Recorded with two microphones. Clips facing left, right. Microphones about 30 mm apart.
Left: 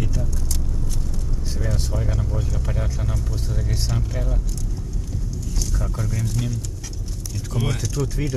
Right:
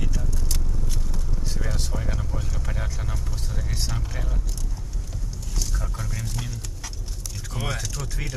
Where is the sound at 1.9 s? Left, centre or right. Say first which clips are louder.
Left 4 dB; centre.